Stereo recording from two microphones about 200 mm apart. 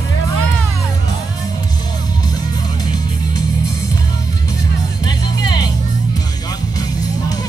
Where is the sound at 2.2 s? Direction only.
20° left (ahead or behind).